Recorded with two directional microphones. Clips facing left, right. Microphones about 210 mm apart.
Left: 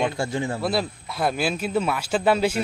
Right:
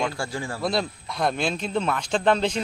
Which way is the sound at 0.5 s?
5° left (ahead or behind).